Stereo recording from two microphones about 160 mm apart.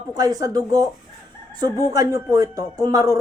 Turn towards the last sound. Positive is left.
turn(degrees=-20)  # may be behind; listen again after turning